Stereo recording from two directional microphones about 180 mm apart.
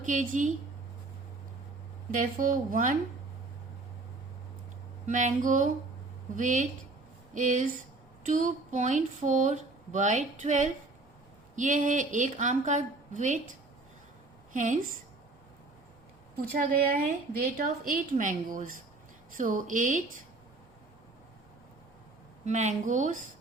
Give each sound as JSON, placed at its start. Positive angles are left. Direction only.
{"t": 0.0, "sound": "a woman's voice", "side_deg": -45}
{"t": 2.0, "sound": "a woman's voice", "side_deg": -50}
{"t": 5.0, "sound": "a woman's voice", "side_deg": -45}
{"t": 14.5, "sound": "a woman's voice", "side_deg": -45}
{"t": 16.3, "sound": "a woman's voice", "side_deg": -60}
{"t": 22.4, "sound": "a woman's voice", "side_deg": -40}